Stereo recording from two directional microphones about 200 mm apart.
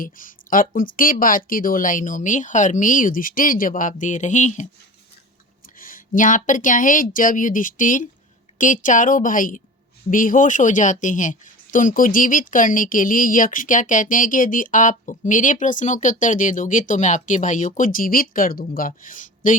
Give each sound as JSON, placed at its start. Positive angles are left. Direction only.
{"t": 0.0, "sound": "speech", "side_deg": 40}
{"t": 5.8, "sound": "speech", "side_deg": 40}